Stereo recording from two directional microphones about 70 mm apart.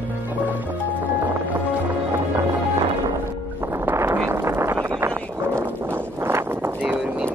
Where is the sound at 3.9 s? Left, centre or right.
Right.